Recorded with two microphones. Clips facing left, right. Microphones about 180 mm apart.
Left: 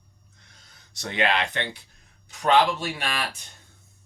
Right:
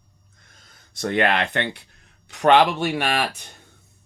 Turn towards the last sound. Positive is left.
turn(degrees=-65)  # may be behind; listen again after turning